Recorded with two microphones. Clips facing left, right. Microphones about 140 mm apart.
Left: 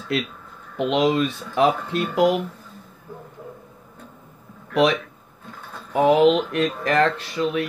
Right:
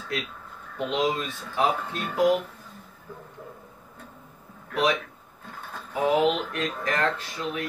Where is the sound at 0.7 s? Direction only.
80° left.